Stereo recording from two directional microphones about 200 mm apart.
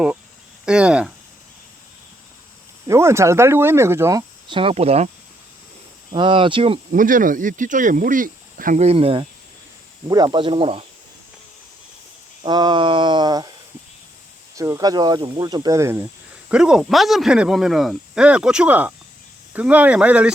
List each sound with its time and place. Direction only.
0.6 s speech: 5° right (ahead or behind)
2.8 s speech: 15° right (ahead or behind); by 5.0 s 30° right (ahead or behind)
6.1 s speech: 25° right (ahead or behind)
6.9 s speech: 40° right (ahead or behind)
12.4 s a sound: 20° right (ahead or behind)
14.5 s speech: 15° right (ahead or behind)
16.5 s speech: 5° right (ahead or behind)